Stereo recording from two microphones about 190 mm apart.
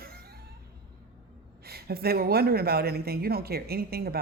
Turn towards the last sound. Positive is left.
turn(degrees=-55)  # may be behind; listen again after turning